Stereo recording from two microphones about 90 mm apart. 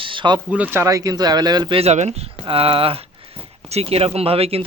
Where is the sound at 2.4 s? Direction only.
90° right.